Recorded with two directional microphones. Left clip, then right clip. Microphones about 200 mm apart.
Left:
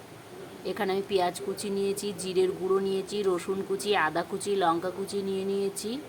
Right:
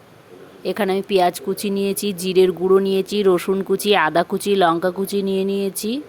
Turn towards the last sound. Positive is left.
turn(degrees=-40)  # may be behind; listen again after turning